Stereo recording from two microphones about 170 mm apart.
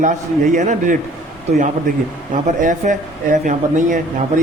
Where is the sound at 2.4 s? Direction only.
45° right (ahead or behind).